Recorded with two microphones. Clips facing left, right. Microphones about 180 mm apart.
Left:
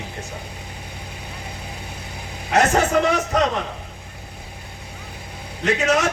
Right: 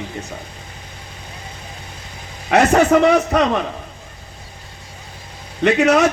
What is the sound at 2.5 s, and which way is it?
Speech, 65° right (ahead or behind).